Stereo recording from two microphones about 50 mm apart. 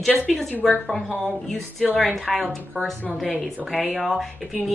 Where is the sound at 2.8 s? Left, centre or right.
Right.